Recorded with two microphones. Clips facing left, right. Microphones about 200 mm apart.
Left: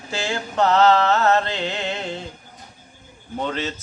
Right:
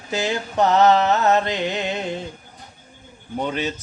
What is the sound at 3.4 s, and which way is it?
Speech, 15° right (ahead or behind).